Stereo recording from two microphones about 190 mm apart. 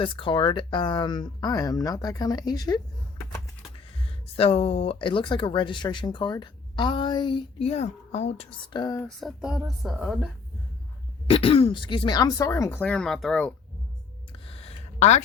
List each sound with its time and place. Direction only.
0.0 s speech: 25° left (ahead or behind)
4.4 s speech: 30° left (ahead or behind)
9.0 s a woman's voice: centre (ahead or behind)
11.3 s speech: 30° left (ahead or behind); by 13.5 s centre (ahead or behind)
14.3 s a sound: 30° left (ahead or behind)